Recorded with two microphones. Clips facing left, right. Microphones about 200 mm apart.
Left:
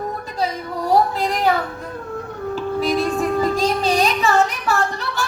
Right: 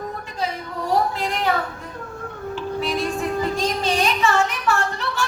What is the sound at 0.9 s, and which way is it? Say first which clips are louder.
Female singing: left 4 dB; 35° left (ahead or behind).